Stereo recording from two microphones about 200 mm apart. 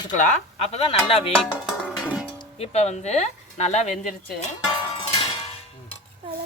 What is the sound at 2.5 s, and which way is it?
Speech, 30° left (ahead or behind).